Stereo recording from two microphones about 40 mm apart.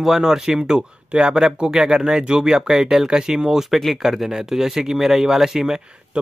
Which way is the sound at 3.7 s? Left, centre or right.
Centre.